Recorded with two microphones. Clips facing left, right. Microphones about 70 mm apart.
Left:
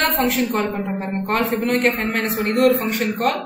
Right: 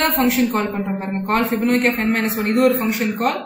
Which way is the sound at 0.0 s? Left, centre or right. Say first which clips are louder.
Right 2 dB; centre.